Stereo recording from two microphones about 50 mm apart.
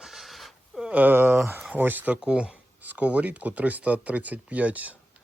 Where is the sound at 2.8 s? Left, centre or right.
Right.